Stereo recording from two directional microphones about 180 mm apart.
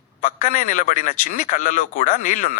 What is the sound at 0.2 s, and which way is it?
Speech, 50° left (ahead or behind).